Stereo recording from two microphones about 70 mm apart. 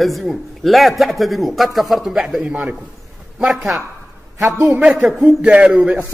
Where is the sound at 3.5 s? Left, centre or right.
Centre.